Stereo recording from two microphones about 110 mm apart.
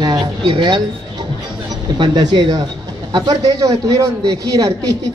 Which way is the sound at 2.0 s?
40° right (ahead or behind).